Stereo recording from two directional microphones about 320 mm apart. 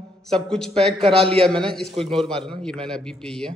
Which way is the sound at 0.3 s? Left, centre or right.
Centre.